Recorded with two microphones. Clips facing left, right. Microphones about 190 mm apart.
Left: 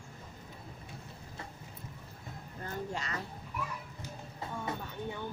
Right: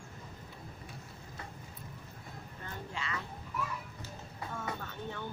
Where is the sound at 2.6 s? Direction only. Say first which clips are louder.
Left 4 dB; 40° left (ahead or behind).